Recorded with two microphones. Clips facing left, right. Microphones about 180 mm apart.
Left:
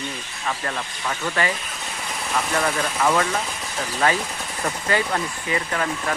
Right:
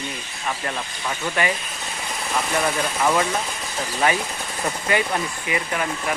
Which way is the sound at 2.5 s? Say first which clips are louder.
Right 1 dB; 10° right (ahead or behind).